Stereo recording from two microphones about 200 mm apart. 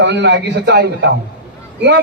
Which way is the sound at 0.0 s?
60° right (ahead or behind).